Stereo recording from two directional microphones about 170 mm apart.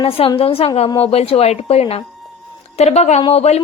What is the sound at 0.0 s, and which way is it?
A woman's voice, 30° left (ahead or behind).